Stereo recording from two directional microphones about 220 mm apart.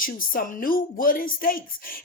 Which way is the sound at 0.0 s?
40° left (ahead or behind).